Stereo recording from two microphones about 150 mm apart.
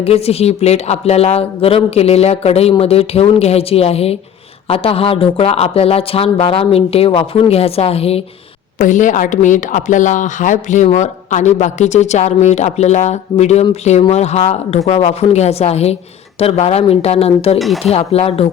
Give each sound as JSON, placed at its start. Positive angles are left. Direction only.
{"t": 0.0, "sound": "speech", "side_deg": 45}
{"t": 8.8, "sound": "speech", "side_deg": 60}